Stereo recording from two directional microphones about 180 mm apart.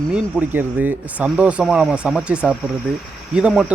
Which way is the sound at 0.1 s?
10° right (ahead or behind).